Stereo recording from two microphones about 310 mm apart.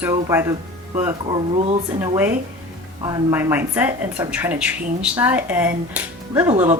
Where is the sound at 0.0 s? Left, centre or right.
Centre.